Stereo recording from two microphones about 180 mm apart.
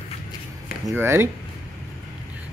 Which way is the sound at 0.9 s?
15° right (ahead or behind).